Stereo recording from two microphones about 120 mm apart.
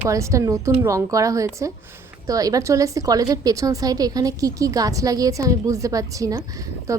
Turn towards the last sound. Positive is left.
turn(degrees=-25)  # may be behind; listen again after turning